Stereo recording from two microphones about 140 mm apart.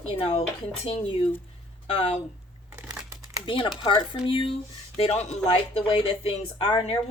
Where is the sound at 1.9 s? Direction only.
40° left (ahead or behind).